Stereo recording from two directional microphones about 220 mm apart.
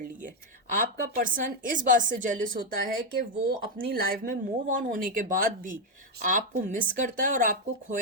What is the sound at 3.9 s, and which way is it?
Speech, 40° right (ahead or behind).